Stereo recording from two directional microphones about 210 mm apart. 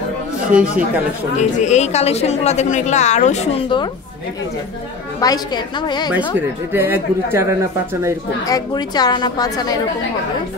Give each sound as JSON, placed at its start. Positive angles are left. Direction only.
{"t": 0.5, "sound": "speech", "side_deg": -5}
{"t": 1.6, "sound": "a woman's voice", "side_deg": 35}
{"t": 5.2, "sound": "a woman's voice", "side_deg": 20}
{"t": 6.7, "sound": "speech", "side_deg": -10}
{"t": 8.5, "sound": "a woman's voice", "side_deg": 20}